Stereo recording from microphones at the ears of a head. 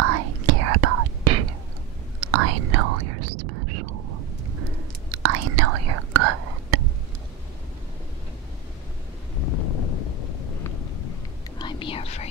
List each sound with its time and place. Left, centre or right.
0.0 s whispering: right
9.4 s wind noise: left